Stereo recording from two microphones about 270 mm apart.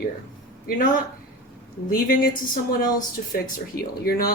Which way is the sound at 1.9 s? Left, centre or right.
Left.